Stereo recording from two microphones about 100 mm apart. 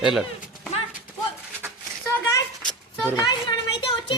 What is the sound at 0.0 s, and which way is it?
Speech, 5° right (ahead or behind).